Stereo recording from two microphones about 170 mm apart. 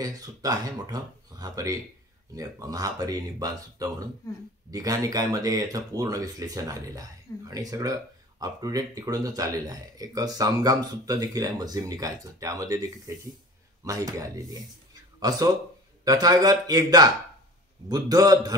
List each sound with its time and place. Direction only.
0.0 s speech: 20° right (ahead or behind)